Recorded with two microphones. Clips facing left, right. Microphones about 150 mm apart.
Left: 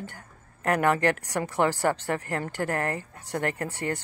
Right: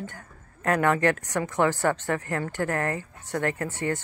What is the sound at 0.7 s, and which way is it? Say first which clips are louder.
Speech: right 1 dB; 10° left (ahead or behind).